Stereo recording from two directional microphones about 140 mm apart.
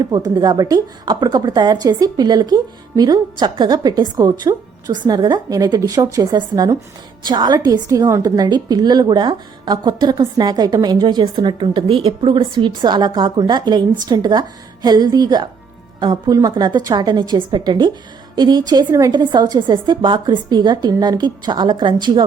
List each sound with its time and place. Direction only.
0.3 s a woman's voice: 30° right (ahead or behind)